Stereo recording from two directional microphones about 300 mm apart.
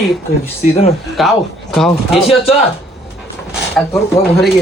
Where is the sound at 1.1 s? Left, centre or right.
Centre.